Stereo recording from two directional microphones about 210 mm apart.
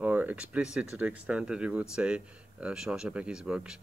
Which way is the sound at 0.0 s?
10° right (ahead or behind).